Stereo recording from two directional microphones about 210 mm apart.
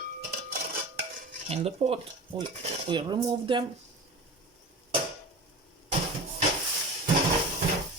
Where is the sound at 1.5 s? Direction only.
30° right (ahead or behind).